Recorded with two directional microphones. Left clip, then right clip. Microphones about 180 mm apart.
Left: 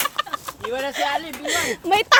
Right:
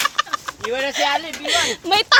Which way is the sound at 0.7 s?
35° right (ahead or behind).